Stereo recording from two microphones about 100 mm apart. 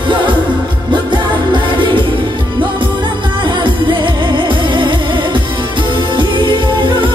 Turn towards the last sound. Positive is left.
turn(degrees=-55)  # may be behind; listen again after turning